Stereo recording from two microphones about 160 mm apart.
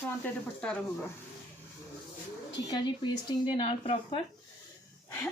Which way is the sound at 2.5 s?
30° left (ahead or behind).